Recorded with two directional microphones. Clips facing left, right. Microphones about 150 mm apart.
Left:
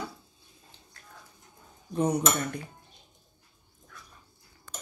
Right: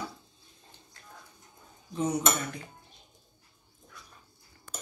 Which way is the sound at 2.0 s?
60° left (ahead or behind).